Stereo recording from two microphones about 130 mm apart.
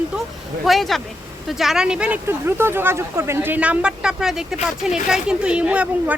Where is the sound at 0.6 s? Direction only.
Centre (ahead or behind).